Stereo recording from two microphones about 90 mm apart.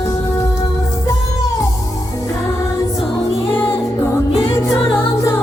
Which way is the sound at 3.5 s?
25° left (ahead or behind).